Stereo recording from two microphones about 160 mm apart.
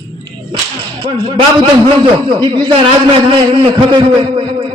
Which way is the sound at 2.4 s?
30° right (ahead or behind).